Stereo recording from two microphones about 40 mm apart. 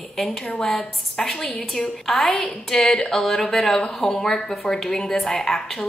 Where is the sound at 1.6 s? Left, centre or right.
Left.